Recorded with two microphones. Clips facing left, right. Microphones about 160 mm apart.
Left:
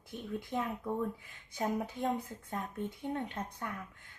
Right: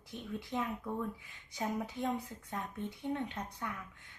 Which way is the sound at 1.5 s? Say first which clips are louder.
Left 3 dB; 45° left (ahead or behind).